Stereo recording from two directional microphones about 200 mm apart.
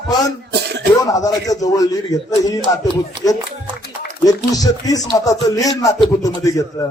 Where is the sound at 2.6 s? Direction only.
25° right (ahead or behind).